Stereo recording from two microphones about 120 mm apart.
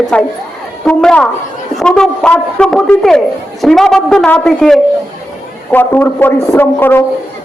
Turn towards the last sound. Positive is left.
turn(degrees=20)  # may be behind; listen again after turning